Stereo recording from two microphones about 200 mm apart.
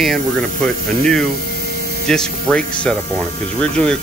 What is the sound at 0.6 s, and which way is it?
Speech, 5° left (ahead or behind).